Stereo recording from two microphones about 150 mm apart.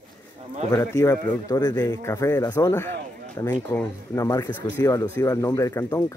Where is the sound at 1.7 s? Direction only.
15° left (ahead or behind).